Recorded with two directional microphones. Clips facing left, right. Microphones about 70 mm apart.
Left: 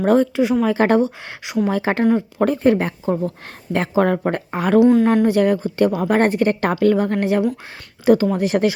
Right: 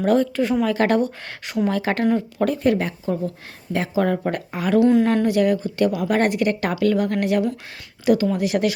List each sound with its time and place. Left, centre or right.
0.0 s speech: left
4.8 s speech: centre
5.2 s speech: left